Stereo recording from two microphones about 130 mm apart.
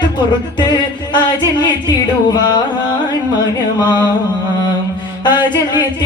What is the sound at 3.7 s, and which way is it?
Music, 30° left (ahead or behind).